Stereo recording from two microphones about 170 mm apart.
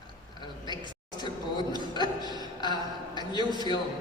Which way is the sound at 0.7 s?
25° left (ahead or behind).